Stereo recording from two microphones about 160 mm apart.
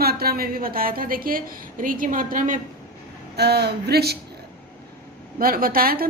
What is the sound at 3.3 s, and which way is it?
Speech, 90° right.